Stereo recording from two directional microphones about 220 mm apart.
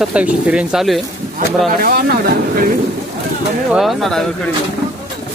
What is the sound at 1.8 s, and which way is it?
Speech, 45° right (ahead or behind).